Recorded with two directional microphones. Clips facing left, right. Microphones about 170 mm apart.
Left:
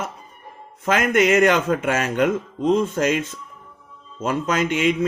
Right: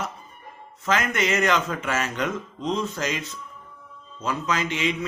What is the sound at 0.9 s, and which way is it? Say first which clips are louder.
A man's voice: left 6 dB; 50° left (ahead or behind).